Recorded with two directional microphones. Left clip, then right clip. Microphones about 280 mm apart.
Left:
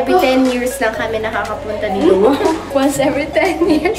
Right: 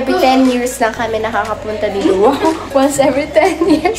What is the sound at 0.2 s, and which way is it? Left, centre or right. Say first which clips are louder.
Speech: right 2 dB; centre.